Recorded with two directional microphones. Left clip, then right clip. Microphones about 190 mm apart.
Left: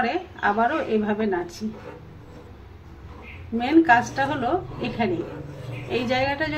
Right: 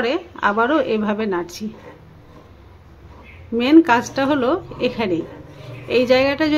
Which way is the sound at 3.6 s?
60° right (ahead or behind).